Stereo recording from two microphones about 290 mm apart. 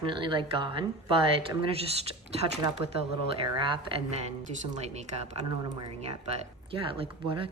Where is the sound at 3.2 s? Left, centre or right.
Centre.